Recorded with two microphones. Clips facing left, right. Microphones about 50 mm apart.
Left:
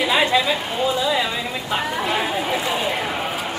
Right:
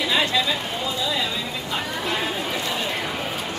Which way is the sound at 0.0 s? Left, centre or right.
Left.